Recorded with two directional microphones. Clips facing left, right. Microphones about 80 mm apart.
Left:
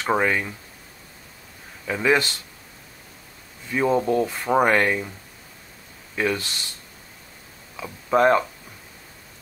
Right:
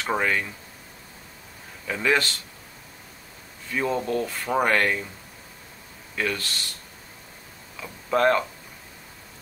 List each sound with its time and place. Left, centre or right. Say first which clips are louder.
0.1 s speech: left 3 dB; centre
1.9 s speech: left 3 dB; centre
3.7 s speech: left 5 dB; centre
6.1 s speech: left 4 dB; centre
7.8 s speech: left 3 dB; centre